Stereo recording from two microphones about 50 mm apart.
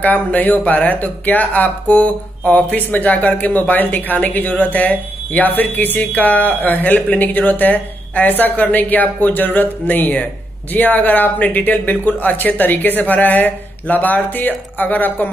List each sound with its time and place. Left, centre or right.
0.0 s speech: left